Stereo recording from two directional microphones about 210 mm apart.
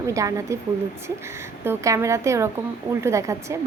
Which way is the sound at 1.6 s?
15° right (ahead or behind).